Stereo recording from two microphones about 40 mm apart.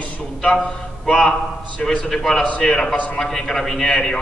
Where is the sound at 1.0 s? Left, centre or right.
Centre.